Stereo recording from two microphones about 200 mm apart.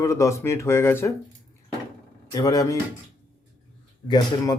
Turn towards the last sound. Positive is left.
turn(degrees=20)  # may be behind; listen again after turning